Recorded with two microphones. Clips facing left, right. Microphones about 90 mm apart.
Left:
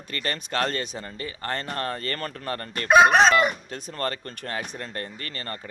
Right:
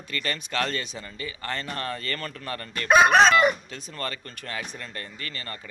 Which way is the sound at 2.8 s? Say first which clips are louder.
Left 1 dB; 20° left (ahead or behind).